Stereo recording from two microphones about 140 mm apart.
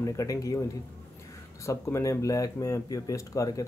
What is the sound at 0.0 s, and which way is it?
Speech, 25° left (ahead or behind).